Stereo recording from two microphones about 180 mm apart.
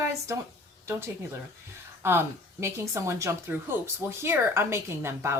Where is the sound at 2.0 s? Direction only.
15° right (ahead or behind).